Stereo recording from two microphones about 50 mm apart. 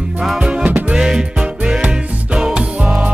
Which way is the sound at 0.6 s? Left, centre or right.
Right.